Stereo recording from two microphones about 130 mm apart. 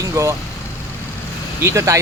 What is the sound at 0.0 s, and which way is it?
Speech, 25° right (ahead or behind).